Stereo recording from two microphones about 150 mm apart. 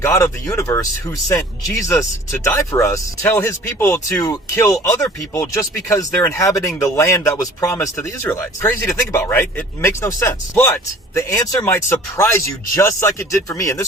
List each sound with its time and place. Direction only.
0.0 s speech: 20° left (ahead or behind)